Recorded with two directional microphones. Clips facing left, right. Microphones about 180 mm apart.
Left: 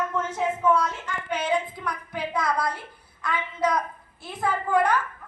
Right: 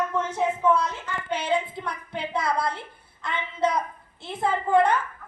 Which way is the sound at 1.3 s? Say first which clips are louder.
Even; 25° right (ahead or behind).